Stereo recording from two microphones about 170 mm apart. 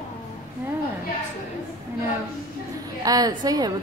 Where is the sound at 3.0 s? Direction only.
20° right (ahead or behind).